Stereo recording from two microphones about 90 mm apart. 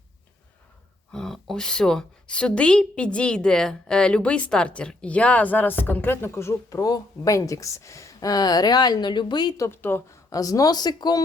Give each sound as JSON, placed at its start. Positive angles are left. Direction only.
{"t": 1.1, "sound": "a woman's voice", "side_deg": 5}
{"t": 9.6, "sound": "speech", "side_deg": 25}
{"t": 10.2, "sound": "speech", "side_deg": 40}